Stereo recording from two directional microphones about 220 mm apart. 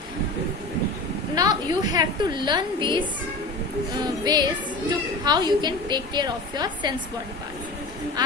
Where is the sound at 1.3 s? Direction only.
20° right (ahead or behind).